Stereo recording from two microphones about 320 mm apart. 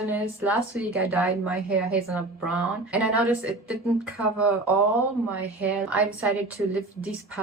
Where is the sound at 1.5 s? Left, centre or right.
Right.